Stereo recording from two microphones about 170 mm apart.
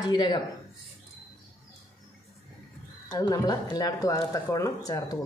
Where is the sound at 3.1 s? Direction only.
20° left (ahead or behind).